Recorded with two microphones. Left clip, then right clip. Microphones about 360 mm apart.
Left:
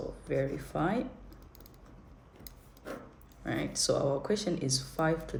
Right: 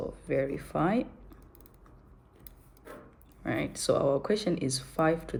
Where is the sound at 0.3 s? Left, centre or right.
Right.